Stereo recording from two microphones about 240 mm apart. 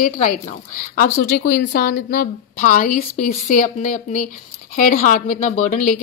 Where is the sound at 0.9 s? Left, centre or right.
Left.